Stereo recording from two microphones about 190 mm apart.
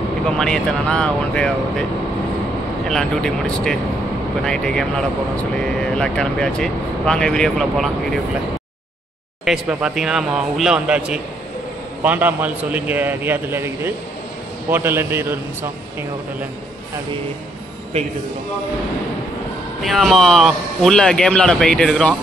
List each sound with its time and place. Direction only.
0.3 s speech: 5° left (ahead or behind)
2.9 s speech: 5° left (ahead or behind)
9.4 s a man's voice: 5° right (ahead or behind)
17.9 s a man's voice: 35° right (ahead or behind)
19.8 s speech: centre (ahead or behind)